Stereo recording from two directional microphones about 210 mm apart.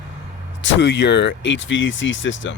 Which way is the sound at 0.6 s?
60° left (ahead or behind).